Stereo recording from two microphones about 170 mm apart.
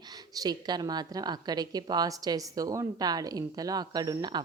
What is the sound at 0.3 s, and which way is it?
A woman's voice, 25° right (ahead or behind).